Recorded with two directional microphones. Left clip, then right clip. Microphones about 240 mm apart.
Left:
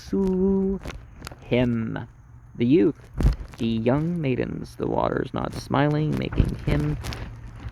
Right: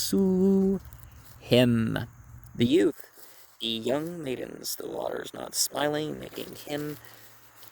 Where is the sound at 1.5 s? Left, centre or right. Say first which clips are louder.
Right 1 dB; right.